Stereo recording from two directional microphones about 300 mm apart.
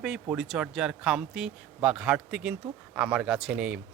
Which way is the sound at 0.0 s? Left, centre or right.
Centre.